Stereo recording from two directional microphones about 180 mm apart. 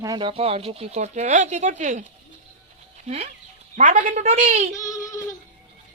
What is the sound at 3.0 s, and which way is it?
Speech, 40° right (ahead or behind).